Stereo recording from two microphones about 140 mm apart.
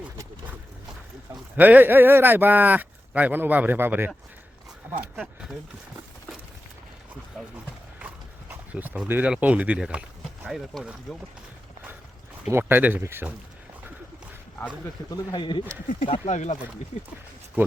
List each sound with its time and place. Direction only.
1.5 s speech: 10° right (ahead or behind)
5.1 s speech: 5° right (ahead or behind)
8.4 s speech: 10° right (ahead or behind)
12.5 s speech: 15° right (ahead or behind)
15.1 s speech: 30° left (ahead or behind)
16.2 s speech: 55° left (ahead or behind)